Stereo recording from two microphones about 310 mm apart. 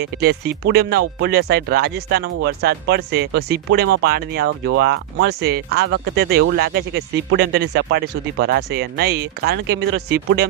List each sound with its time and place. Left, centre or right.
0.0 s speech: right